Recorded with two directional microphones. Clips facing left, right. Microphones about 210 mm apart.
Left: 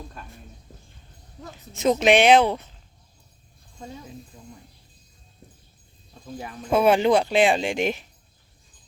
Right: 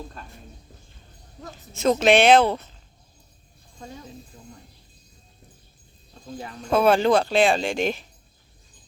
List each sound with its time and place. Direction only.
1.5 s speech: 15° left (ahead or behind)
6.4 s speech: 15° left (ahead or behind)